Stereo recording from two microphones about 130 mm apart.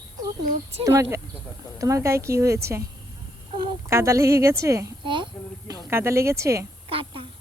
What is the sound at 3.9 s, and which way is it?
Speech, 20° right (ahead or behind).